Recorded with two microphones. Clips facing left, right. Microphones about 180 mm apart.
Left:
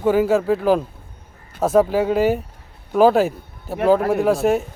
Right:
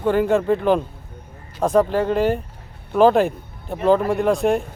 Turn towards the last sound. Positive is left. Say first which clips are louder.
# left 1 dB
turn(degrees=5)  # may be behind; listen again after turning